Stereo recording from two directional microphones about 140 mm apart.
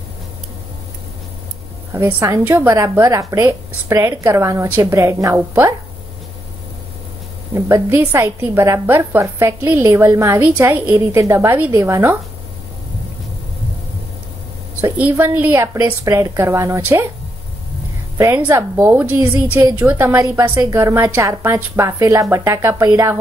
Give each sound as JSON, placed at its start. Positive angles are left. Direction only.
{"t": 2.0, "sound": "a woman's voice", "side_deg": -15}
{"t": 7.5, "sound": "a woman's voice", "side_deg": -20}
{"t": 14.8, "sound": "a woman's voice", "side_deg": -15}
{"t": 18.1, "sound": "a woman's voice", "side_deg": -20}